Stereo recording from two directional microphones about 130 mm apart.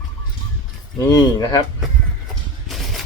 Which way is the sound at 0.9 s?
30° left (ahead or behind).